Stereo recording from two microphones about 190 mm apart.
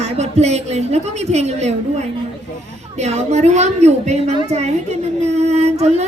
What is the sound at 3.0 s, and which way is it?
A child's voice, 35° right (ahead or behind).